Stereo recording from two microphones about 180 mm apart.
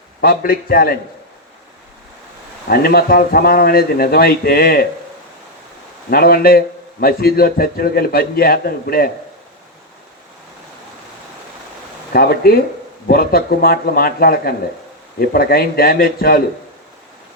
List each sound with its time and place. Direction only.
0.2 s a man's voice: 55° left (ahead or behind)
2.6 s a man's voice: 60° left (ahead or behind)
6.1 s a man's voice: 60° left (ahead or behind)
12.1 s a man's voice: 60° left (ahead or behind)